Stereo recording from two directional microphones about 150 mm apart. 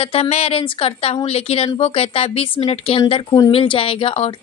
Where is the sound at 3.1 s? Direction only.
25° left (ahead or behind).